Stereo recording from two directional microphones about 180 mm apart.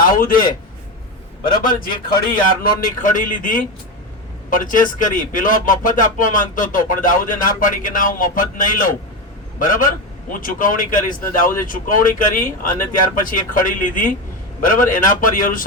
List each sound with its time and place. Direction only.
0.0 s a man's voice: 50° left (ahead or behind)
1.6 s speech: 50° left (ahead or behind)